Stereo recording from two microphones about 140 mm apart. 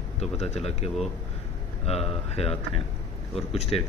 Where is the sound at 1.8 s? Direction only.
45° left (ahead or behind).